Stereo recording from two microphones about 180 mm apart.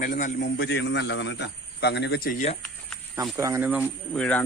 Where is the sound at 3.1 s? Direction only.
15° right (ahead or behind).